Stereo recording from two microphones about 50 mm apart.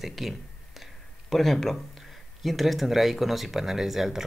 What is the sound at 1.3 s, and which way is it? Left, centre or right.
Speech, centre.